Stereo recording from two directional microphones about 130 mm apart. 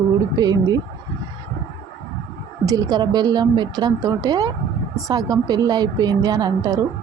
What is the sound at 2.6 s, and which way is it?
Speech, 30° right (ahead or behind).